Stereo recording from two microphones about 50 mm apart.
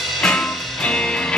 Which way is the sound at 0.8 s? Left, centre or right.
Centre.